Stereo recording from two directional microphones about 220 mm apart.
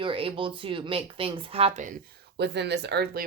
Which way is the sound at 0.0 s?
25° right (ahead or behind).